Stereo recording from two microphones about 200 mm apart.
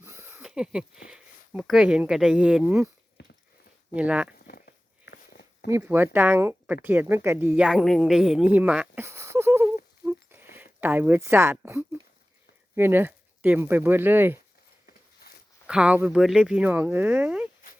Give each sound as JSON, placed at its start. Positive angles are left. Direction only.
{"t": 0.0, "sound": "speech", "side_deg": -10}
{"t": 3.2, "sound": "a sound", "side_deg": 60}
{"t": 3.9, "sound": "speech", "side_deg": -5}
{"t": 4.4, "sound": "a sound", "side_deg": 50}
{"t": 5.6, "sound": "speech", "side_deg": -10}
{"t": 10.1, "sound": "a sound", "side_deg": -10}
{"t": 12.7, "sound": "speech", "side_deg": -10}
{"t": 15.2, "sound": "zipper", "side_deg": 50}
{"t": 15.6, "sound": "speech", "side_deg": -5}